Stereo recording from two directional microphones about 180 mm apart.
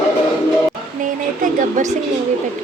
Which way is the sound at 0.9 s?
45° right (ahead or behind).